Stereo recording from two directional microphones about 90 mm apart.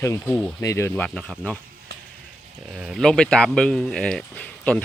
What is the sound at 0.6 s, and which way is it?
Speech, 30° left (ahead or behind).